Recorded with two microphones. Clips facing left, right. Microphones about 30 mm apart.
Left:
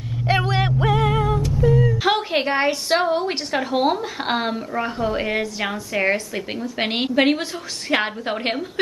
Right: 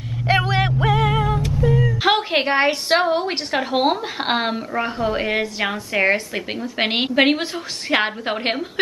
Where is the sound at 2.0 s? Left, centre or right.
Centre.